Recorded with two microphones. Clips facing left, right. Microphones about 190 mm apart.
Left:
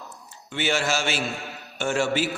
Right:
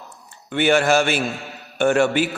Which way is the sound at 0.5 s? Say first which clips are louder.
Right 9 dB; 55° right (ahead or behind).